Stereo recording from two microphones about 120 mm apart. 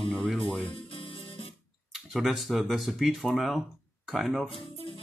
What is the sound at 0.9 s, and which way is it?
Music, 50° left (ahead or behind).